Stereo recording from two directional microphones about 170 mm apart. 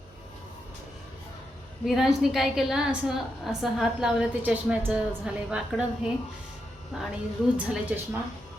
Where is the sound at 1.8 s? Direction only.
Centre (ahead or behind).